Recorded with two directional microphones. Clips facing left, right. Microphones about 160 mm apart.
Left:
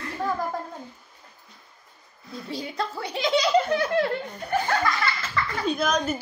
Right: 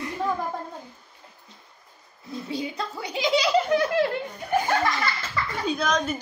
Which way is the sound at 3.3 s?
10° right (ahead or behind).